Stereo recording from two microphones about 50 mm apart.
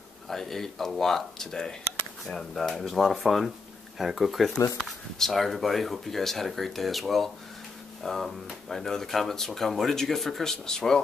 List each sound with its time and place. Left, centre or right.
0.3 s speech: centre